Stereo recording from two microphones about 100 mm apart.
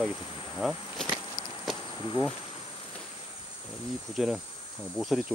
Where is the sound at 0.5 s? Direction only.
Centre (ahead or behind).